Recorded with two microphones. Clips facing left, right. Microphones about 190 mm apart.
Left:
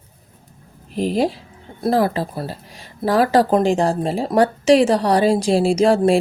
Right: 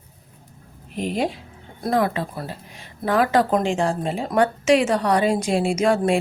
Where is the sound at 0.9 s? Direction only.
35° left (ahead or behind).